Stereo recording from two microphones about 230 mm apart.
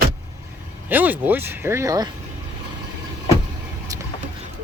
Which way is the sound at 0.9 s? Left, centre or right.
Centre.